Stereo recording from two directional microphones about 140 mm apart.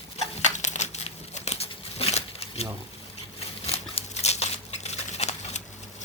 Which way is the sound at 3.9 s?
50° left (ahead or behind).